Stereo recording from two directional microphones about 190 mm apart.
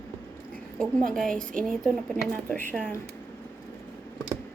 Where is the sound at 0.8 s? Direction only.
5° left (ahead or behind).